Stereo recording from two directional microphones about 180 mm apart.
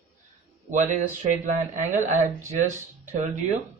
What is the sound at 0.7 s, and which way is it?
Speech, 45° right (ahead or behind).